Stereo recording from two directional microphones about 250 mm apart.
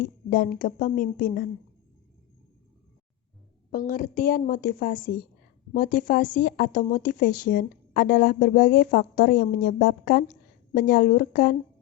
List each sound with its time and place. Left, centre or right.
0.0 s speech: left
3.7 s speech: left